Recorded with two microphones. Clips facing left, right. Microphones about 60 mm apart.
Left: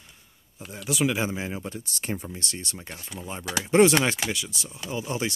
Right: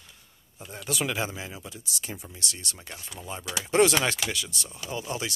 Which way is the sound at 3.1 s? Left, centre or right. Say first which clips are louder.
Left 3 dB; centre.